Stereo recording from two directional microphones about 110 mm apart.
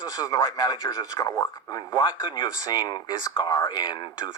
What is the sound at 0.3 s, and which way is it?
Speech, 40° left (ahead or behind).